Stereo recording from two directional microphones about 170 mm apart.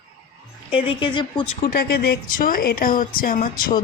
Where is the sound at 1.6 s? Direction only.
60° left (ahead or behind).